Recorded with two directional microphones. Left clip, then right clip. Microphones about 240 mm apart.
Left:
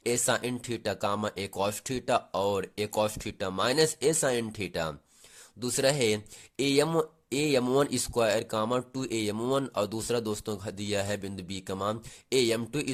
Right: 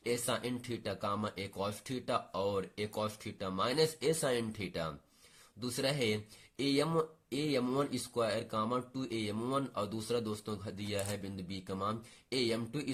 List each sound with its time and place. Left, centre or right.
0.0 s speech: left